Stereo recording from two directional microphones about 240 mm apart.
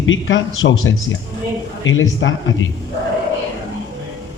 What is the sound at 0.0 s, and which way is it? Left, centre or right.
Speech, left.